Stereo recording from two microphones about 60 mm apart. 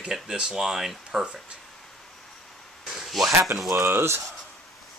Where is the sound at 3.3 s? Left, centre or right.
Right.